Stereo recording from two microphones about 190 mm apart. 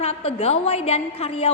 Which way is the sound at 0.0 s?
35° left (ahead or behind).